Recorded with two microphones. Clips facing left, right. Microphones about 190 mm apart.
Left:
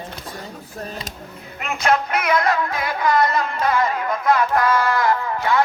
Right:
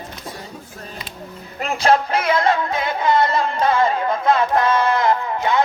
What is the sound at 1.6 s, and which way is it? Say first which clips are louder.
Music: right 3 dB; 30° right (ahead or behind).